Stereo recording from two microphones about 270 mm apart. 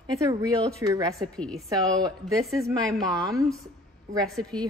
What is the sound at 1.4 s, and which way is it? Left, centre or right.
Speech, centre.